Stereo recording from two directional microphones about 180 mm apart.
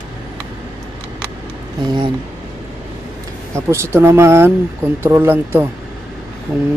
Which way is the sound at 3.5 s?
15° right (ahead or behind).